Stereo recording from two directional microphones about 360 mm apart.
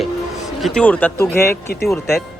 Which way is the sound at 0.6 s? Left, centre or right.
Centre.